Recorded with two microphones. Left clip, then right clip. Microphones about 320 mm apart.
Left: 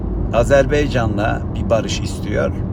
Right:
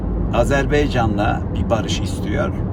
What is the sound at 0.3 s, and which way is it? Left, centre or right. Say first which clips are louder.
Speech: left 4 dB; centre.